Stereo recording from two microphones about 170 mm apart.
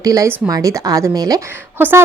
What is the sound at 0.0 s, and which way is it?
A woman's voice, 20° right (ahead or behind).